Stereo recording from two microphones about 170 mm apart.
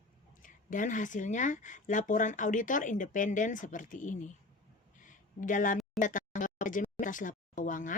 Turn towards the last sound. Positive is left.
turn(degrees=50)  # may be behind; listen again after turning